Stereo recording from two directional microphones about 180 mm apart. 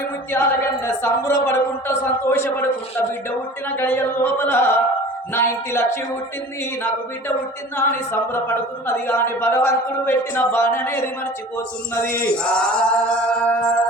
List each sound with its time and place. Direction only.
0.4 s a man's voice: 15° left (ahead or behind)
3.8 s a man's voice: 10° left (ahead or behind)
7.8 s a man's voice: 15° left (ahead or behind)
12.0 s battle cry: 50° left (ahead or behind)
12.4 s music: 5° left (ahead or behind)